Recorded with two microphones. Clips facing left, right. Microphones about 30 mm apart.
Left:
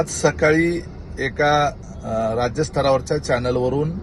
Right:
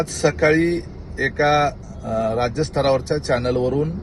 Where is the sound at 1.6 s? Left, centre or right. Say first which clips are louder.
Even; right.